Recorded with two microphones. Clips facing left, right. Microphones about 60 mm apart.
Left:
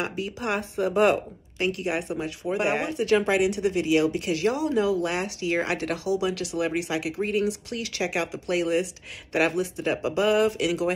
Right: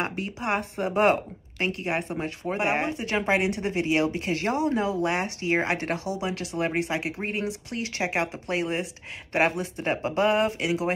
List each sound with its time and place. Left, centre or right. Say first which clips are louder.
0.0 s speech: even; right